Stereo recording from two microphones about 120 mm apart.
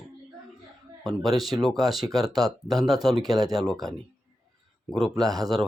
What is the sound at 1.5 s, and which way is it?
Speech, centre (ahead or behind).